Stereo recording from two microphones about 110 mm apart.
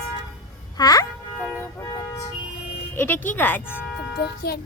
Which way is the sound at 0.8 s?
35° left (ahead or behind).